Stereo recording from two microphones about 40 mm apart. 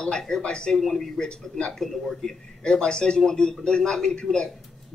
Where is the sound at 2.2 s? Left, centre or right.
Left.